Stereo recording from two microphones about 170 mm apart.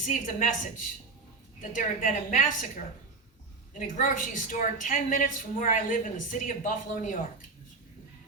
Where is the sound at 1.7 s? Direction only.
50° left (ahead or behind).